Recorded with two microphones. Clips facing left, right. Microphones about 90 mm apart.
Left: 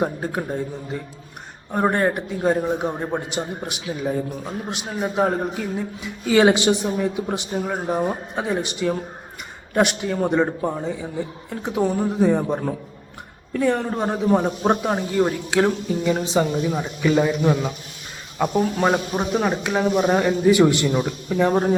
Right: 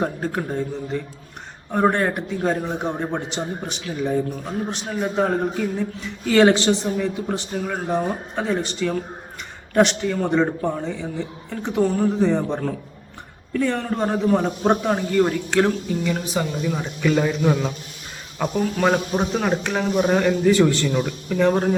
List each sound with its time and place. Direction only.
0.0 s speech: 10° left (ahead or behind)
1.7 s speech: 5° left (ahead or behind)
16.0 s speech: 25° left (ahead or behind)
16.7 s a man's voice: 5° left (ahead or behind)